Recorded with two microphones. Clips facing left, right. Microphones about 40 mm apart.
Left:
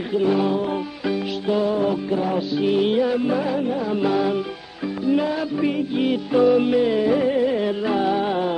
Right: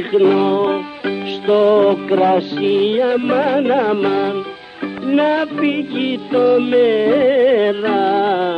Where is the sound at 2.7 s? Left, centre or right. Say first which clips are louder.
Right 5 dB; right.